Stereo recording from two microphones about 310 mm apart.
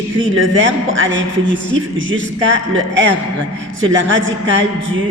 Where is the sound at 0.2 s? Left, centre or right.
Right.